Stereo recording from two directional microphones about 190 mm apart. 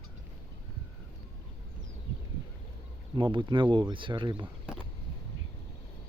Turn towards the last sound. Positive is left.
turn(degrees=-25)  # may be behind; listen again after turning